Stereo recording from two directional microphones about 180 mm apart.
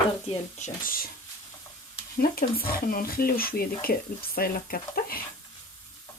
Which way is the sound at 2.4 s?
55° left (ahead or behind).